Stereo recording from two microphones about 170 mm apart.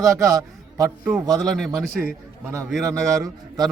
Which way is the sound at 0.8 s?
10° right (ahead or behind).